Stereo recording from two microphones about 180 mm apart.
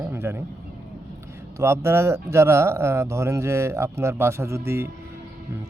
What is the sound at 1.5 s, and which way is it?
Speech, 15° right (ahead or behind).